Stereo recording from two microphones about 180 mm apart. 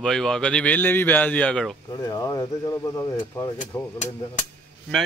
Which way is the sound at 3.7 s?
10° left (ahead or behind).